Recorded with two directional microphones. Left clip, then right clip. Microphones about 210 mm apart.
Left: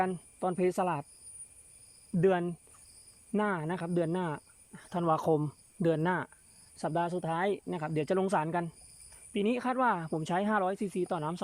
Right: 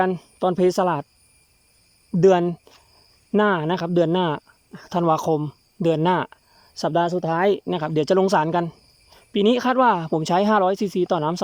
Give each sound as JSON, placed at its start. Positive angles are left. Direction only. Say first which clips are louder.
{"t": 0.0, "sound": "speech", "louder": "right 11 dB", "side_deg": -25}
{"t": 2.2, "sound": "speech", "louder": "right 12 dB", "side_deg": -25}
{"t": 5.1, "sound": "speech", "louder": "right 7 dB", "side_deg": -5}